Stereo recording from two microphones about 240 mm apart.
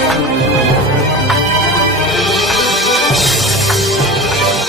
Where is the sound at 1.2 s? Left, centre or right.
Centre.